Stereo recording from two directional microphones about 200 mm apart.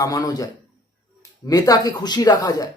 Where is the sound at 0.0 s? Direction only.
20° left (ahead or behind).